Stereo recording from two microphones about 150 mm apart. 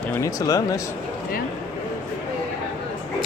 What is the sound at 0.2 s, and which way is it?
Speech, 20° left (ahead or behind).